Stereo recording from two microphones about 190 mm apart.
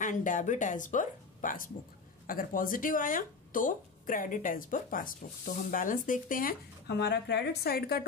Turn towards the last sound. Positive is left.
turn(degrees=55)  # may be behind; listen again after turning